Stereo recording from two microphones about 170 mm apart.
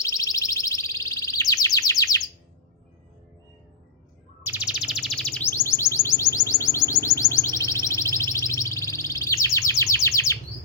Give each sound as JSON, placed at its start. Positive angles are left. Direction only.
{"t": 0.0, "sound": "bird", "side_deg": 20}
{"t": 4.4, "sound": "bird", "side_deg": -10}
{"t": 5.5, "sound": "music", "side_deg": 15}